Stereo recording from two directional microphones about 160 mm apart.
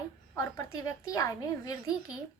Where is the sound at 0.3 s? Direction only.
20° left (ahead or behind).